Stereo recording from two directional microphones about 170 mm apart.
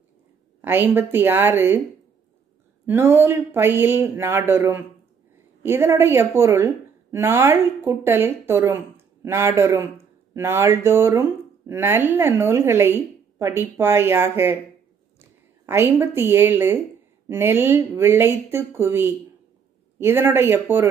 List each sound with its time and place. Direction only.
0.6 s speech: 10° right (ahead or behind)
2.9 s speech: 15° right (ahead or behind)
15.6 s speech: 15° right (ahead or behind)